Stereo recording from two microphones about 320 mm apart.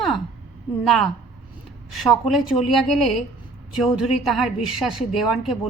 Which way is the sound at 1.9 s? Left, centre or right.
Centre.